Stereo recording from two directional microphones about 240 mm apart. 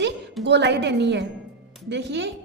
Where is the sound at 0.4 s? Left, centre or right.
Right.